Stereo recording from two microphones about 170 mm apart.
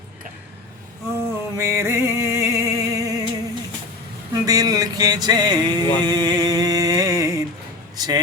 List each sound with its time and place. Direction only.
1.1 s a sound: 15° right (ahead or behind)
4.4 s music: 20° right (ahead or behind)
7.9 s speech: 25° right (ahead or behind)